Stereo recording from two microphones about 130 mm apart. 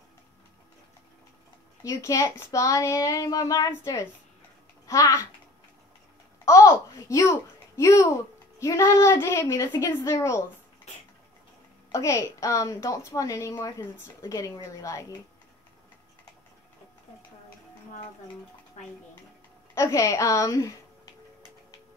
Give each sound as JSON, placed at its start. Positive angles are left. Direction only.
{"t": 1.8, "sound": "a woman's voice", "side_deg": 25}
{"t": 6.4, "sound": "a child's voice", "side_deg": 25}
{"t": 11.9, "sound": "a woman's voice", "side_deg": 25}
{"t": 19.7, "sound": "speech", "side_deg": 25}